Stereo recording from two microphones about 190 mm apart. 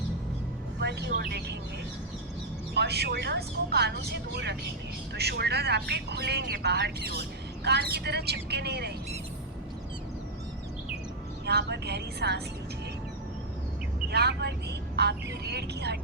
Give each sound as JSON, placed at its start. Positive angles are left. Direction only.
{"t": 0.8, "sound": "speech", "side_deg": -60}
{"t": 2.7, "sound": "speech", "side_deg": -60}
{"t": 5.1, "sound": "speech", "side_deg": -55}
{"t": 11.4, "sound": "speech", "side_deg": -60}
{"t": 14.1, "sound": "speech", "side_deg": -60}